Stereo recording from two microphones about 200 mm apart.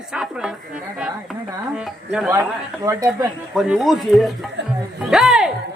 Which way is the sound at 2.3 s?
15° right (ahead or behind).